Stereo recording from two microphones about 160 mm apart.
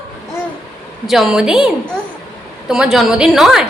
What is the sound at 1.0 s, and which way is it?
A woman's voice, centre (ahead or behind).